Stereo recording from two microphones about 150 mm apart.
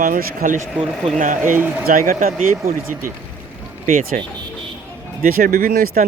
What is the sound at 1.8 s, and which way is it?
Speech, 65° right (ahead or behind).